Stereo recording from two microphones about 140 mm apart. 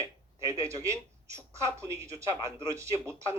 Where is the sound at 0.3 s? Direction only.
20° right (ahead or behind).